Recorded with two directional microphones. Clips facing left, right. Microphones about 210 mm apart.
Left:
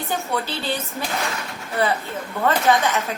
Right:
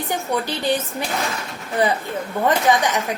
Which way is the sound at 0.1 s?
15° right (ahead or behind).